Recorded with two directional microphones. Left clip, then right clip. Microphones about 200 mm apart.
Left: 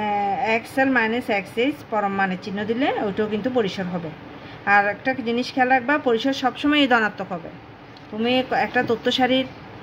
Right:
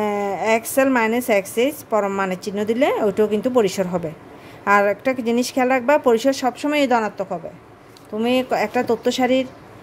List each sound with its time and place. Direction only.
0.0 s a woman's voice: 45° right (ahead or behind); by 7.2 s 25° right (ahead or behind)
8.2 s a woman's voice: 40° right (ahead or behind)